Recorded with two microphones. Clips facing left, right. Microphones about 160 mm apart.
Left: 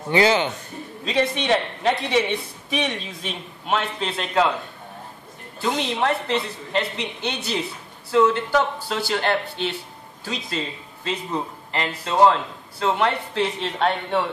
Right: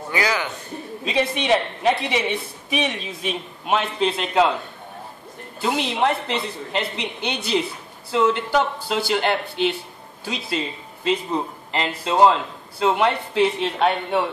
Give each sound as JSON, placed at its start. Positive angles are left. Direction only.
{"t": 0.1, "sound": "a man's voice", "side_deg": 25}
{"t": 1.0, "sound": "speech", "side_deg": -10}
{"t": 5.6, "sound": "speech", "side_deg": -15}
{"t": 11.7, "sound": "speech", "side_deg": -20}